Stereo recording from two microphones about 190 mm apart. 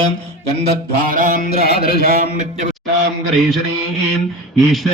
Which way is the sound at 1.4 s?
55° left (ahead or behind).